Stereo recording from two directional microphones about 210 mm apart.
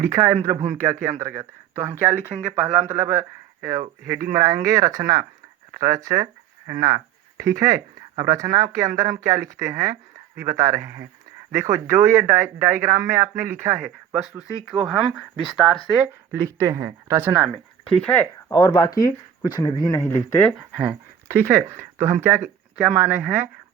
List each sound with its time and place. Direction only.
0.0 s speech: 10° right (ahead or behind)
16.3 s speech: 15° right (ahead or behind)
18.0 s speech: 10° left (ahead or behind)
20.6 s speech: 5° right (ahead or behind)